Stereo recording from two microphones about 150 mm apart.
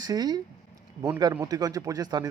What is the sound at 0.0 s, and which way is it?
Speech, 25° right (ahead or behind).